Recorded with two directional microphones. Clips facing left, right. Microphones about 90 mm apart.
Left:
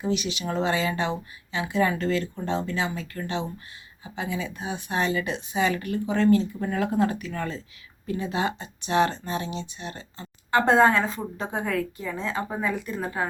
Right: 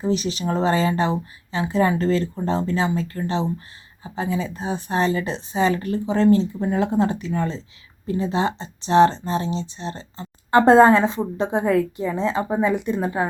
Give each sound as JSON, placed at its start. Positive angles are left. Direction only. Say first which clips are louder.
{"t": 0.0, "sound": "a woman's voice", "louder": "right 5 dB", "side_deg": -35}